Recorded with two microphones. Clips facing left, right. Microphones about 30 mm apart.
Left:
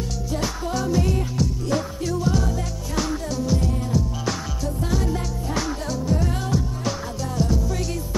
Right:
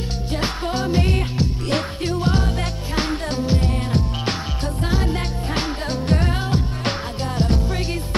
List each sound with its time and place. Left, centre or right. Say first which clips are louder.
0.4 s music: right 3 dB; right